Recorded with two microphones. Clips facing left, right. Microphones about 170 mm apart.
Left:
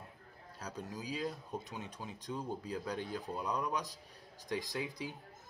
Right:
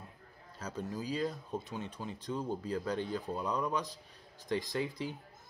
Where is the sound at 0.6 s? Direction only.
15° left (ahead or behind).